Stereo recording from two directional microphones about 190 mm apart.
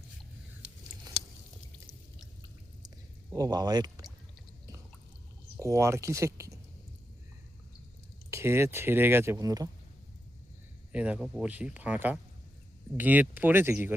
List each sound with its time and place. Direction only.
2.8 s a sound: 20° right (ahead or behind)
5.5 s speech: 15° right (ahead or behind)
8.3 s speech: 15° right (ahead or behind)
10.9 s speech: 5° right (ahead or behind)